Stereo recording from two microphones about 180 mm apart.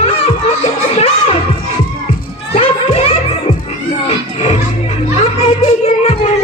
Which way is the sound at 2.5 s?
35° left (ahead or behind).